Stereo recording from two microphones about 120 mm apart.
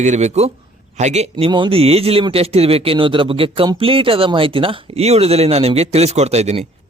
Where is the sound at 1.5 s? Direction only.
45° right (ahead or behind).